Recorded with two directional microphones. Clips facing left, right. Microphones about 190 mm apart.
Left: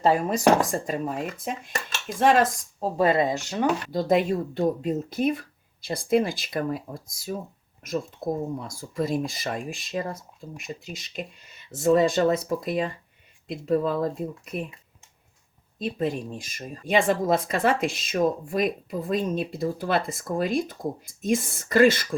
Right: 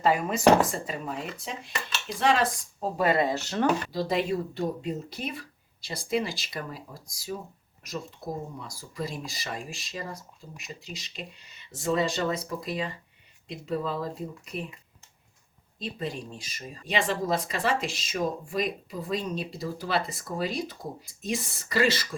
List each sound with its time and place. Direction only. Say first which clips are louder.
0.0 s speech: left 3 dB; 35° left (ahead or behind)
0.7 s speech: left 6 dB; 45° left (ahead or behind)
3.0 s speech: left 3 dB; 20° left (ahead or behind)
3.9 s speech: left 5 dB; 50° left (ahead or behind)
15.8 s speech: left 7 dB; 50° left (ahead or behind)